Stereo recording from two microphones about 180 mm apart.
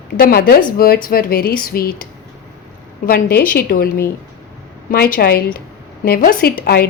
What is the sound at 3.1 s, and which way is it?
A woman's voice, 55° left (ahead or behind).